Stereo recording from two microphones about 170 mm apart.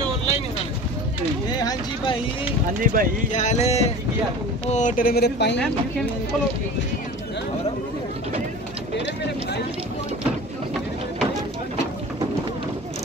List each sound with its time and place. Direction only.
1.5 s a sound: 25° left (ahead or behind)
2.8 s speech: 55° right (ahead or behind)
3.3 s music: 40° left (ahead or behind)
4.6 s speech: 45° left (ahead or behind); by 5.6 s 80° left
8.9 s run: 90° left